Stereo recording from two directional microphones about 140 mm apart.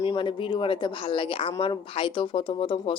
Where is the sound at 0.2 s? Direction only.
35° left (ahead or behind).